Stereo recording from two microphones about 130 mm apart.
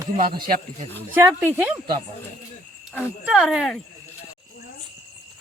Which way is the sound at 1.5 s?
10° right (ahead or behind).